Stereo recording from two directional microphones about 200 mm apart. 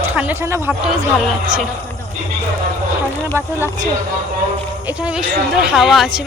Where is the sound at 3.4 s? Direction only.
10° right (ahead or behind).